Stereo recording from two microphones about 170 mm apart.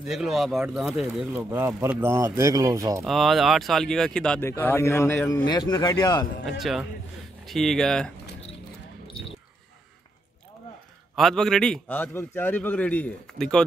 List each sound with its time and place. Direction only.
0.0 s speech: centre (ahead or behind)
1.3 s speech: 10° right (ahead or behind)
3.0 s a man's voice: centre (ahead or behind)
5.5 s speech: 25° left (ahead or behind)
6.6 s speech: centre (ahead or behind)
11.1 s a man's voice: centre (ahead or behind)